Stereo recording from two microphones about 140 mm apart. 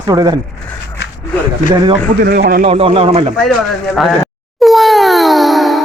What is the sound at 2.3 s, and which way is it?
Speech, 90° right.